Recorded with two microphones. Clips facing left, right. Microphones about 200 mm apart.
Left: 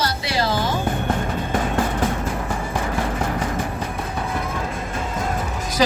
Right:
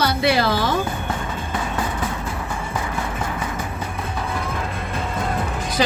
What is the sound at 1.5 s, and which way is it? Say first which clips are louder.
Vehicle: left 4 dB; 50° left (ahead or behind).